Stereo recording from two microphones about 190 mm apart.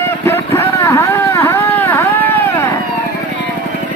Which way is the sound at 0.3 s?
15° left (ahead or behind).